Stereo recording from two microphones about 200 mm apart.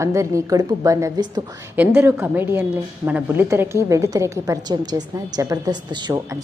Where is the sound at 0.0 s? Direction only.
15° right (ahead or behind).